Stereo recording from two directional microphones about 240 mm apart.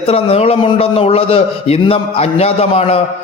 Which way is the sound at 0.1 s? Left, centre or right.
Left.